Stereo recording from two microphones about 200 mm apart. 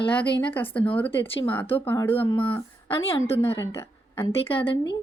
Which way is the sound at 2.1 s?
25° left (ahead or behind).